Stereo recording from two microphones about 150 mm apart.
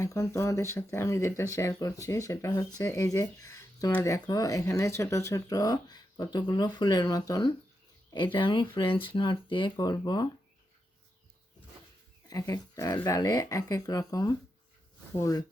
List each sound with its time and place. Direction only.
0.0 s speech: 20° left (ahead or behind)
12.3 s speech: 25° left (ahead or behind)